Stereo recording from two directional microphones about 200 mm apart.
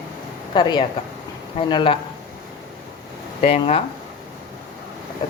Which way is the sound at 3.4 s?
30° left (ahead or behind).